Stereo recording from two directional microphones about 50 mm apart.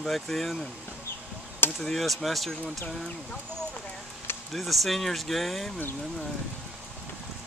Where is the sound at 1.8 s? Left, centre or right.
Centre.